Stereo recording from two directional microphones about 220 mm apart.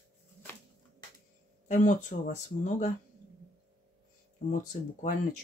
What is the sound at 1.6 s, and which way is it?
Speech, 35° left (ahead or behind).